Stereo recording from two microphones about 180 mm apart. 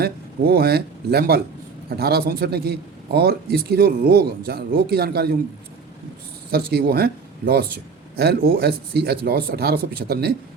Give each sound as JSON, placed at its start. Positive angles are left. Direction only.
{"t": 0.0, "sound": "a man's voice", "side_deg": -60}
{"t": 6.7, "sound": "a man's voice", "side_deg": -55}